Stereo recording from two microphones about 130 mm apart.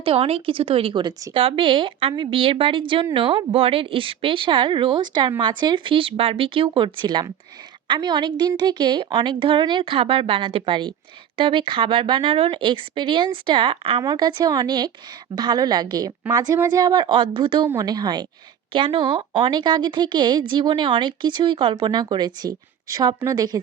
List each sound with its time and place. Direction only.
0.0 s a woman's voice: 50° right (ahead or behind)
14.0 s a woman's voice: 35° right (ahead or behind)
17.7 s a woman's voice: 30° right (ahead or behind)